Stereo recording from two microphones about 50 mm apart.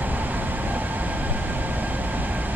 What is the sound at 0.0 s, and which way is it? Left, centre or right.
Train, right.